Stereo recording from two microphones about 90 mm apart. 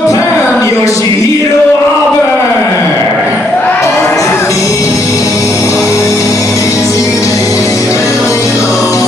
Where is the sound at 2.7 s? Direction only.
30° left (ahead or behind).